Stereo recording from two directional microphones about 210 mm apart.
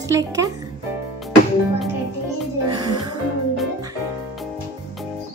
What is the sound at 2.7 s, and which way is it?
Music, 20° right (ahead or behind).